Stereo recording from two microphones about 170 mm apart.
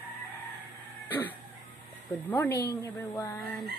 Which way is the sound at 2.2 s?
10° left (ahead or behind).